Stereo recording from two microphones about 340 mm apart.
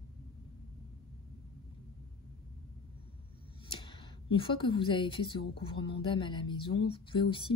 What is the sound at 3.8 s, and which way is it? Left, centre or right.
A woman's voice, centre.